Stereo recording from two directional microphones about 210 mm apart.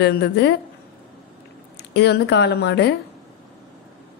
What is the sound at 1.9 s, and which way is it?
Speech, 55° left (ahead or behind).